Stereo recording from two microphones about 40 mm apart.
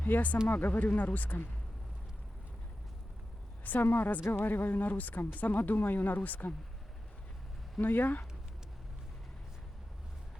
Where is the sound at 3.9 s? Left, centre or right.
Left.